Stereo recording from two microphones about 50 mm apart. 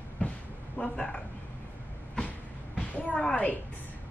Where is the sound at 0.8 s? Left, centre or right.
Centre.